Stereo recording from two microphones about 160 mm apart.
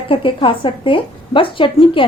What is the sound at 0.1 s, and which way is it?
A woman's voice, 35° left (ahead or behind).